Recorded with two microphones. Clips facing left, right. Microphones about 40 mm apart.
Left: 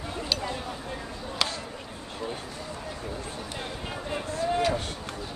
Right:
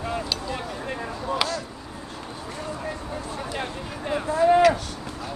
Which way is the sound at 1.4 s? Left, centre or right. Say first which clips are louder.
Right 2 dB; centre.